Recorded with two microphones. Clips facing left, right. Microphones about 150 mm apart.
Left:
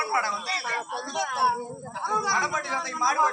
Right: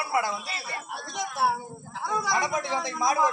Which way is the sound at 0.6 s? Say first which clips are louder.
Left 5 dB; 90° left.